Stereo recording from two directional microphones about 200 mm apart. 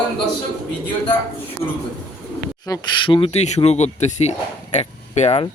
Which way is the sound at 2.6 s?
20° left (ahead or behind).